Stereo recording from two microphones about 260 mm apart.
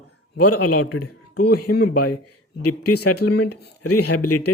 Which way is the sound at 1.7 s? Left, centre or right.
Left.